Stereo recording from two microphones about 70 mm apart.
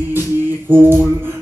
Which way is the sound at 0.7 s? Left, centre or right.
Right.